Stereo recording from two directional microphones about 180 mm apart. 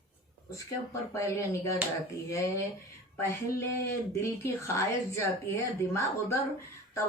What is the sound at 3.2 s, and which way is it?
Speech, 15° left (ahead or behind).